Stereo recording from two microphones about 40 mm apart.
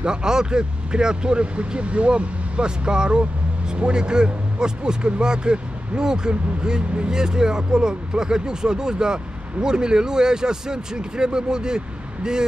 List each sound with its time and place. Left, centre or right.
0.0 s speech: right